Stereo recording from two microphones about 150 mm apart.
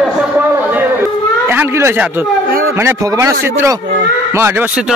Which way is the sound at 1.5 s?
15° right (ahead or behind).